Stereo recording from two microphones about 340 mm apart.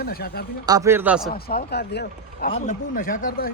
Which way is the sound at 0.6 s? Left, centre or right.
Centre.